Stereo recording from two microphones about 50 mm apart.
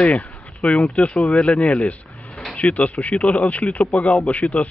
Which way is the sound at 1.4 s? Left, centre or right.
Left.